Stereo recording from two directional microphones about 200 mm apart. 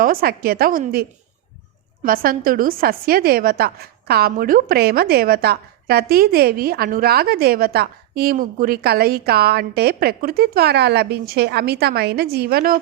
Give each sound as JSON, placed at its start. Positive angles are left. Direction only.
{"t": 0.0, "sound": "a woman's voice", "side_deg": -45}
{"t": 2.0, "sound": "a woman's voice", "side_deg": -45}